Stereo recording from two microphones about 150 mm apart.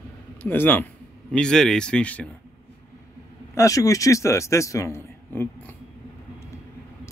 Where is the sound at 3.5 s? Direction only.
20° left (ahead or behind).